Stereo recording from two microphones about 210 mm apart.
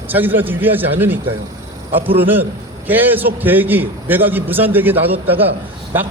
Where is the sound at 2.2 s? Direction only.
10° right (ahead or behind).